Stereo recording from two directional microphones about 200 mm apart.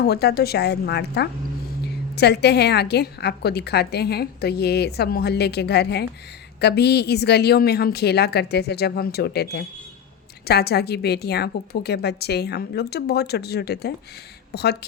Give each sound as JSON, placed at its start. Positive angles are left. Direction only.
{"t": 0.0, "sound": "a woman's voice", "side_deg": 55}